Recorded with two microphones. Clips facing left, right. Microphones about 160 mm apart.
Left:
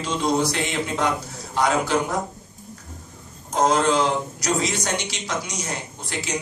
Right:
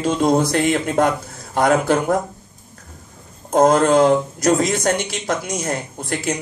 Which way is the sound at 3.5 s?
50° right (ahead or behind).